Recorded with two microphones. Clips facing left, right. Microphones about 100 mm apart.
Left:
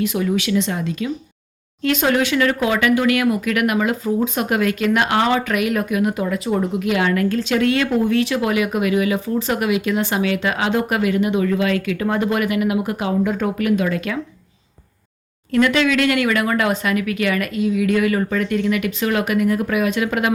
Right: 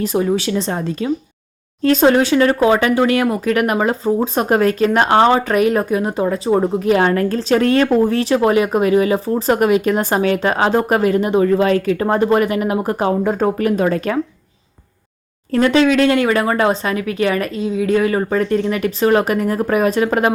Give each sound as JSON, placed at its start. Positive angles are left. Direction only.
{"t": 0.0, "sound": "speech", "side_deg": -35}
{"t": 15.5, "sound": "speech", "side_deg": -35}